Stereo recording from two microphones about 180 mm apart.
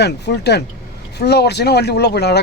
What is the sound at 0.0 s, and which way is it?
Speech, 70° left (ahead or behind).